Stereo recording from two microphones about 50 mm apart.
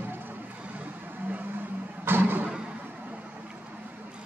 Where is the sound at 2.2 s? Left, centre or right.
Right.